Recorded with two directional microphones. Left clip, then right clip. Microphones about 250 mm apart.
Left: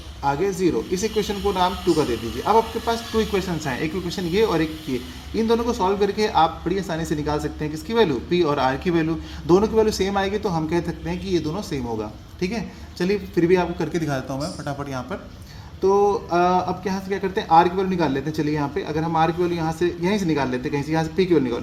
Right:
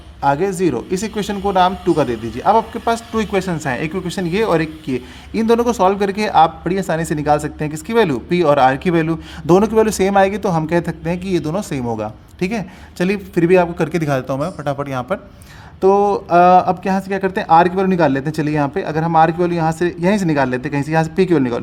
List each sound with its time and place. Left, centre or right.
0.2 s a man's voice: right